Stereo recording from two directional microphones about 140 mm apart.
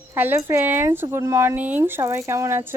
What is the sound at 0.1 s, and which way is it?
Speech, 15° right (ahead or behind).